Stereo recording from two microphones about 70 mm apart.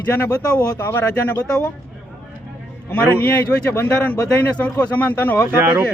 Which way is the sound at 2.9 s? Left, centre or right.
Centre.